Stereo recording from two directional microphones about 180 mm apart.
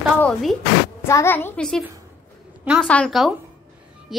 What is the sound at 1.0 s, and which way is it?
Speech, 15° left (ahead or behind).